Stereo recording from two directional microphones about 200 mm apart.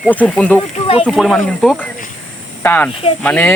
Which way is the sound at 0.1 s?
10° left (ahead or behind).